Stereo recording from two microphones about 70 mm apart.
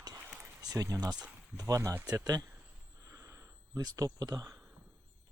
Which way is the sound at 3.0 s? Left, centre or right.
Right.